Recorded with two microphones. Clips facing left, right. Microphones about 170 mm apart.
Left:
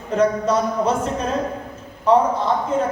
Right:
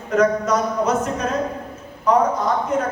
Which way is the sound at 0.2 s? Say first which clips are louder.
Even; 30° left (ahead or behind).